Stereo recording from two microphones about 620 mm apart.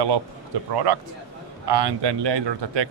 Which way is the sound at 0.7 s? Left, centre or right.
Right.